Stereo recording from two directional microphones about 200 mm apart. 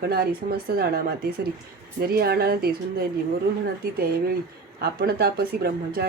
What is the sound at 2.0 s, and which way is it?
Speech, 50° right (ahead or behind).